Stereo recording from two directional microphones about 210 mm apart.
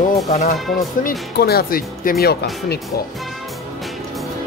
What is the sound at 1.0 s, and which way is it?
Speech, 45° left (ahead or behind).